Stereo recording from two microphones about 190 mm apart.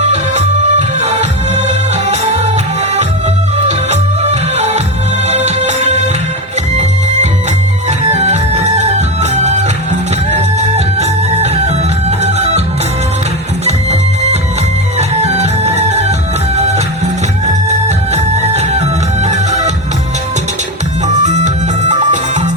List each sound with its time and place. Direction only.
0.1 s music: 35° right (ahead or behind)
3.7 s music: 35° right (ahead or behind)
7.9 s music: 35° right (ahead or behind)
10.8 s music: 35° right (ahead or behind)
14.9 s music: 35° right (ahead or behind)
17.4 s music: 35° right (ahead or behind)
21.1 s music: 40° right (ahead or behind)